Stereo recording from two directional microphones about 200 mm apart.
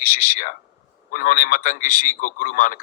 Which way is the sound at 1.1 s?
40° left (ahead or behind).